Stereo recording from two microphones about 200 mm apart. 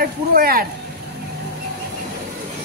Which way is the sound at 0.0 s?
45° right (ahead or behind).